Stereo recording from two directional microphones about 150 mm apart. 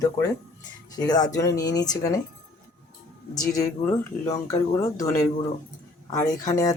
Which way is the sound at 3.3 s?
25° left (ahead or behind).